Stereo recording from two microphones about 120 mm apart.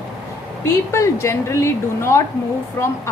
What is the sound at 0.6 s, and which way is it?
A woman's voice, 25° left (ahead or behind).